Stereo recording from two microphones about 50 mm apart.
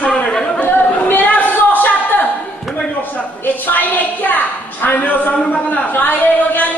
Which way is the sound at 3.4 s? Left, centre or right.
Left.